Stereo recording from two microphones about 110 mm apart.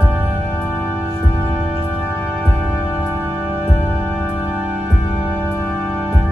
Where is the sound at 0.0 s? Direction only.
15° right (ahead or behind).